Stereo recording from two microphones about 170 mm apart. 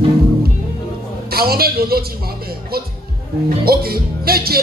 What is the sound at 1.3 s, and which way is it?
Speech, 65° right (ahead or behind).